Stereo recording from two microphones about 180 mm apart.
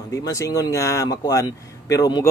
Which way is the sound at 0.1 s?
20° left (ahead or behind).